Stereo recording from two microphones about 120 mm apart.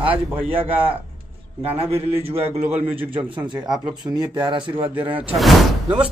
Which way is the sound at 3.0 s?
40° right (ahead or behind).